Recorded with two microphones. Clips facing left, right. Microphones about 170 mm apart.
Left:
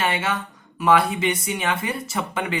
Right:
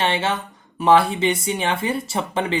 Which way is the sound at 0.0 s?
25° right (ahead or behind).